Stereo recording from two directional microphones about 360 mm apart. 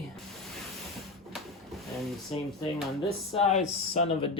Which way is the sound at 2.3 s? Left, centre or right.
Centre.